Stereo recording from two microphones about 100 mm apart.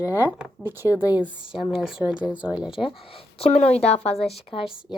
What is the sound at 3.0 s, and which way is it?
Speech, 70° left (ahead or behind).